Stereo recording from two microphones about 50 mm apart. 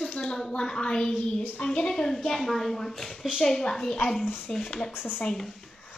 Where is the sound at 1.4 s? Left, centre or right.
Left.